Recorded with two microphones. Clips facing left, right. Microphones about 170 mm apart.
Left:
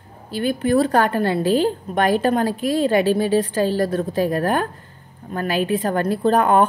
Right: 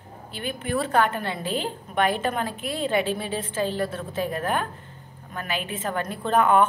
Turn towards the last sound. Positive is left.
turn(degrees=40)  # may be behind; listen again after turning